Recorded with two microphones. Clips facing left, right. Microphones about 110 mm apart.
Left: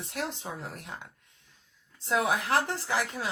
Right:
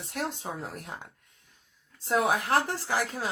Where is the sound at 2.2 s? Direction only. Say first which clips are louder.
Right 1 dB; 40° right (ahead or behind).